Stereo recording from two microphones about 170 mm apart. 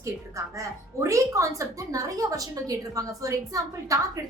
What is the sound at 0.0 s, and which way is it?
A woman's voice, 20° right (ahead or behind).